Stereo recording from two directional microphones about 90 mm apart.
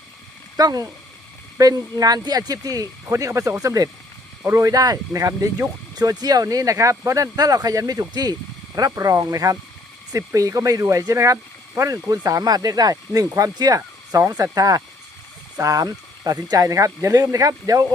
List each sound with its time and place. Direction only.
0.5 s speech: 45° right (ahead or behind)
13.2 s speech: 35° right (ahead or behind)
13.6 s speech: 45° right (ahead or behind)